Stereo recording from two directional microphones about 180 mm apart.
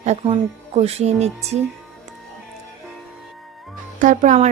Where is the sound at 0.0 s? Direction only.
35° right (ahead or behind).